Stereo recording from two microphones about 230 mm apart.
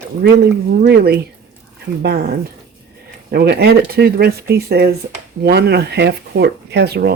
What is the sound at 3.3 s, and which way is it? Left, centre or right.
Speech, right.